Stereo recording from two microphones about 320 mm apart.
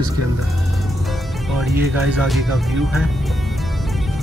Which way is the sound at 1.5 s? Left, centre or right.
Centre.